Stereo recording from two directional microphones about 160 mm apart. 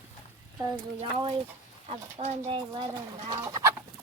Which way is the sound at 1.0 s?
40° right (ahead or behind).